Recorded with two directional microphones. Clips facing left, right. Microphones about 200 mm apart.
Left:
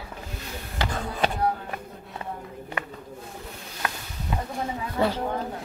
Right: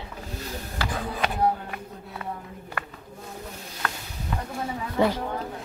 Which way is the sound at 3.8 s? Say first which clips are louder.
Left 1 dB; 15° left (ahead or behind).